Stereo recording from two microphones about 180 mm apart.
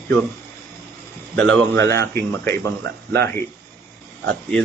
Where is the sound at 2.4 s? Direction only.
70° right (ahead or behind).